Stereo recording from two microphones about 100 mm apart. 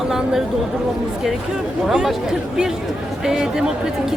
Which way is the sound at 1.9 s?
5° right (ahead or behind).